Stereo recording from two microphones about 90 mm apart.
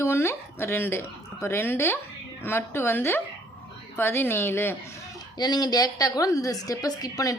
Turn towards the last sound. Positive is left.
turn(degrees=45)  # may be behind; listen again after turning